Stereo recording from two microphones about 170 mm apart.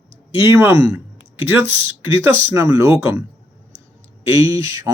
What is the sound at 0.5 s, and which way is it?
Speech, 10° right (ahead or behind).